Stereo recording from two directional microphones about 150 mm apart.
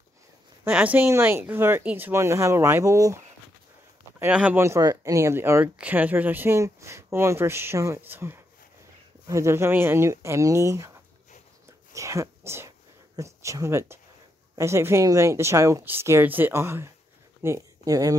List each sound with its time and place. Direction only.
0.7 s speech: 10° right (ahead or behind)
4.2 s speech: 10° right (ahead or behind)
11.9 s a sound: 20° right (ahead or behind)
14.5 s speech: 20° right (ahead or behind)